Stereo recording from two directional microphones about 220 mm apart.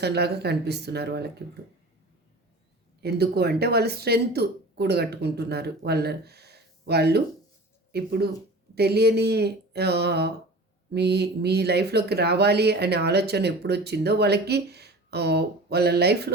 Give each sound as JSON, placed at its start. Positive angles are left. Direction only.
{"t": 0.0, "sound": "speech", "side_deg": -50}
{"t": 3.0, "sound": "speech", "side_deg": -45}